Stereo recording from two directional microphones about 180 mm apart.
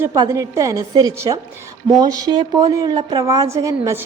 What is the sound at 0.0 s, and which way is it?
A woman's voice, 15° right (ahead or behind).